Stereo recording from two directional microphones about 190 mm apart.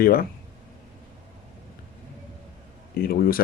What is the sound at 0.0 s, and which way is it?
Speech, 50° left (ahead or behind).